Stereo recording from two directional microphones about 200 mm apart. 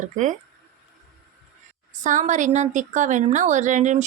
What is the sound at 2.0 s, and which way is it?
A woman's voice, 40° right (ahead or behind).